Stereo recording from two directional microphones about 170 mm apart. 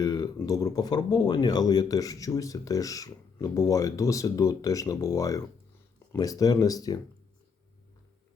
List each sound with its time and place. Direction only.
0.0 s speech: 20° left (ahead or behind)